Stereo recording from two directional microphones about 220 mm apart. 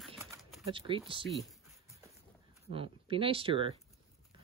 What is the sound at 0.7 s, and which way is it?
Speech, 25° right (ahead or behind).